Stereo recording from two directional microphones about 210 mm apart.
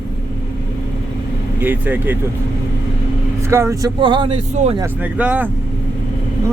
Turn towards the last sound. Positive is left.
turn(degrees=-10)  # may be behind; listen again after turning